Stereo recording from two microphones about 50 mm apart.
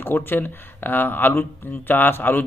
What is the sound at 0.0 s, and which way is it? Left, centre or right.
Speech, left.